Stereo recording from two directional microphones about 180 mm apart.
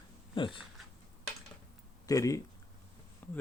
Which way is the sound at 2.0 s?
20° left (ahead or behind).